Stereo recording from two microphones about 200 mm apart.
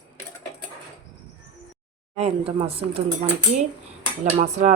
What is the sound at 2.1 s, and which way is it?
Speech, 30° right (ahead or behind).